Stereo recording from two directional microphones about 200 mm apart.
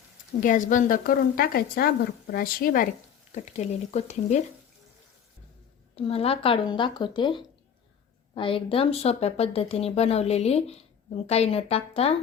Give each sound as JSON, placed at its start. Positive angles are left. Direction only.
{"t": 0.3, "sound": "a woman's voice", "side_deg": 40}
{"t": 3.3, "sound": "speech", "side_deg": 35}
{"t": 6.0, "sound": "speech", "side_deg": 30}